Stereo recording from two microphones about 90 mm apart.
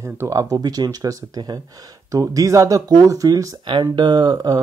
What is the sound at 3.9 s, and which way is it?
Speech, 50° right (ahead or behind).